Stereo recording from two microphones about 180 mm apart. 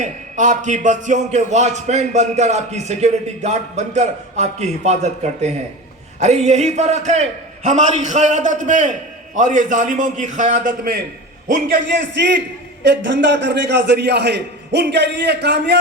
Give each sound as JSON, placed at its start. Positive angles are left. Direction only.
{"t": 0.0, "sound": "a man's voice", "side_deg": -45}
{"t": 12.1, "sound": "a man's voice", "side_deg": -70}